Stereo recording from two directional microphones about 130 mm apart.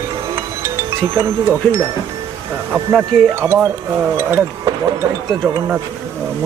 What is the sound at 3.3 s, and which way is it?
Speech, 20° right (ahead or behind).